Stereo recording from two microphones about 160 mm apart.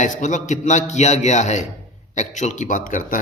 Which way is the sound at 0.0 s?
50° left (ahead or behind).